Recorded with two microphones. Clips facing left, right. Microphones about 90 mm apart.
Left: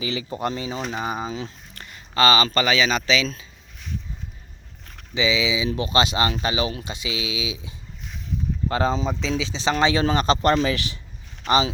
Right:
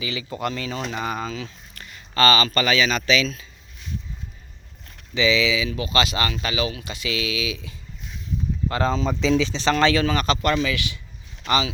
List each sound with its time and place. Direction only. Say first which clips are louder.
0.0 s speech: left 1 dB; 35° left (ahead or behind); by 1.4 s 15° left (ahead or behind)
1.4 s a sound: left 2 dB; 30° left (ahead or behind)
2.5 s speech: even; 20° left (ahead or behind)
5.1 s speech: right 2 dB; 15° left (ahead or behind)
5.6 s speech: left 2 dB; 30° left (ahead or behind)
8.7 s speech: left 1 dB; 20° left (ahead or behind)
9.2 s speech: right 4 dB; 5° left (ahead or behind)
10.0 s speech: left 2 dB; 30° left (ahead or behind)